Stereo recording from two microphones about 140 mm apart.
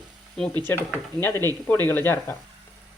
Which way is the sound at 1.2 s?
15° left (ahead or behind).